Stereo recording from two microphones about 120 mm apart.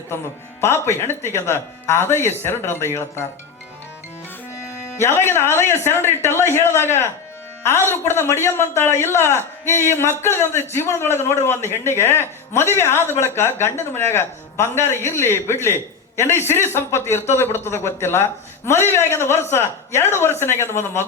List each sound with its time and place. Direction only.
0.6 s a man's voice: 20° left (ahead or behind)
4.9 s a man's voice: 20° left (ahead or behind)